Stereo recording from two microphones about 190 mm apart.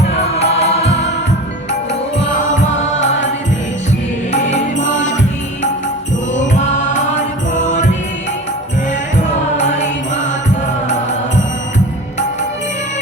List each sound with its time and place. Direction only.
0.3 s music: 35° left (ahead or behind)
4.3 s music: 40° left (ahead or behind)
6.5 s music: 40° left (ahead or behind)
9.6 s music: 40° left (ahead or behind)